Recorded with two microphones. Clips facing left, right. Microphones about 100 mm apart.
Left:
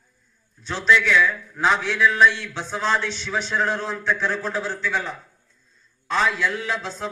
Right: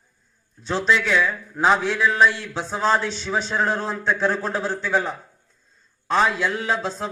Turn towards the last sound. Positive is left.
turn(degrees=-35)  # may be behind; listen again after turning